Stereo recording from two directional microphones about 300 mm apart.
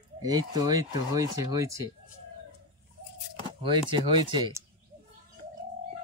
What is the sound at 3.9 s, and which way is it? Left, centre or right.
Speech, centre.